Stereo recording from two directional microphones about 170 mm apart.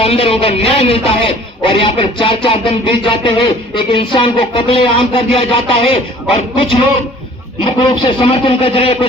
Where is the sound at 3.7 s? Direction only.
30° left (ahead or behind).